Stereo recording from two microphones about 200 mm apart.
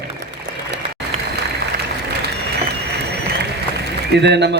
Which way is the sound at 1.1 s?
30° right (ahead or behind).